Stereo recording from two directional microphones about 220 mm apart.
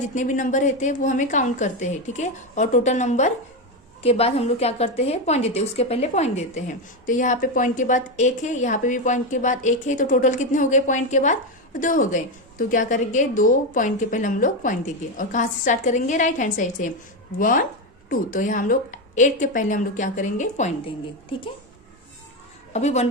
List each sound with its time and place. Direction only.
0.1 s a woman's voice: 35° left (ahead or behind)
18.1 s a woman's voice: 40° left (ahead or behind)
22.7 s a woman's voice: 30° left (ahead or behind)